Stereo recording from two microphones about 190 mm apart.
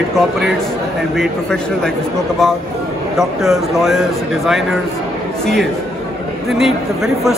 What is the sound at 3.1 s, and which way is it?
Speech, centre (ahead or behind).